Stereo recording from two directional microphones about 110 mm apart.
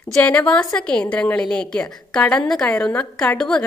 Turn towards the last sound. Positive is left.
turn(degrees=5)  # may be behind; listen again after turning